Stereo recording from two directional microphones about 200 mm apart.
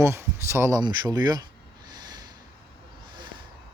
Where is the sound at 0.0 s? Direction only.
15° right (ahead or behind).